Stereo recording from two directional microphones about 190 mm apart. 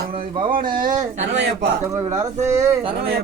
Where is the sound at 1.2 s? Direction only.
65° right (ahead or behind).